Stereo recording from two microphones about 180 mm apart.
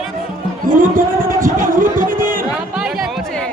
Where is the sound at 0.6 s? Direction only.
50° right (ahead or behind).